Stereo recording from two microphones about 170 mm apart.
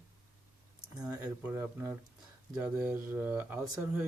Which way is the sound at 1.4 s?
10° right (ahead or behind).